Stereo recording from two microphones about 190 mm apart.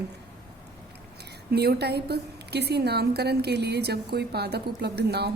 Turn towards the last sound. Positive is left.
turn(degrees=-60)  # may be behind; listen again after turning